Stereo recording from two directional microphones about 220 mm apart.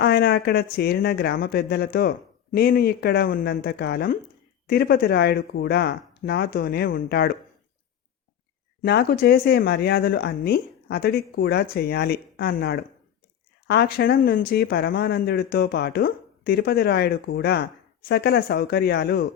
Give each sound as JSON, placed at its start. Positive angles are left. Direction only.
{"t": 0.0, "sound": "speech", "side_deg": 45}
{"t": 8.8, "sound": "speech", "side_deg": 45}